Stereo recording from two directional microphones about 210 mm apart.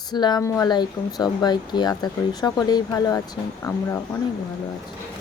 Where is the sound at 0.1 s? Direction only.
20° left (ahead or behind).